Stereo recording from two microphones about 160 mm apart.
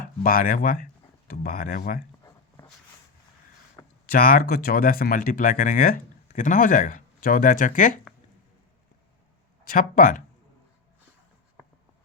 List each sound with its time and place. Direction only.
0.2 s speech: 60° left (ahead or behind)
3.8 s a sound: 20° left (ahead or behind)
4.1 s speech: 65° left (ahead or behind)
9.6 s speech: 60° left (ahead or behind)